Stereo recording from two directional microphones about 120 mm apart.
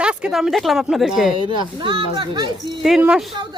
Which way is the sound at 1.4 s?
45° right (ahead or behind).